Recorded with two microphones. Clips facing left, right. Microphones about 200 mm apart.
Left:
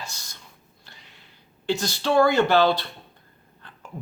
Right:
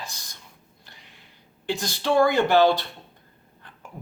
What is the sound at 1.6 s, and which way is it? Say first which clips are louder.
A man's voice: left 1 dB; 15° right (ahead or behind).